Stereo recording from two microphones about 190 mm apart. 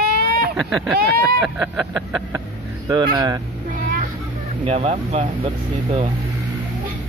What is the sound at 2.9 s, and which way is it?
Speech, 20° right (ahead or behind).